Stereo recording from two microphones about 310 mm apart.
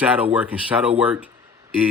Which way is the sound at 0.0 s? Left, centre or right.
Centre.